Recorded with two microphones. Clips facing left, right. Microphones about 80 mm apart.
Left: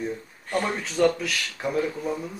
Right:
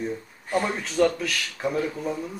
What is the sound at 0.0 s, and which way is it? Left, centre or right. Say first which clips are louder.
A woman's voice: right 1 dB; centre.